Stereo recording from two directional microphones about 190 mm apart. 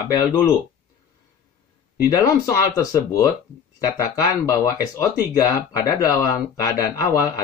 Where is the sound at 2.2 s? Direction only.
15° left (ahead or behind).